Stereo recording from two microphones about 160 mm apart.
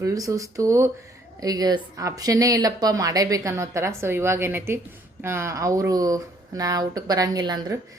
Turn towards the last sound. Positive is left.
turn(degrees=-25)  # may be behind; listen again after turning